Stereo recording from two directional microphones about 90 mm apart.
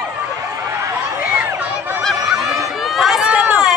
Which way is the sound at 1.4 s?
20° right (ahead or behind).